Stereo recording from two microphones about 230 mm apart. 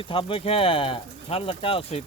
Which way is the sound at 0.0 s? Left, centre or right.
Left.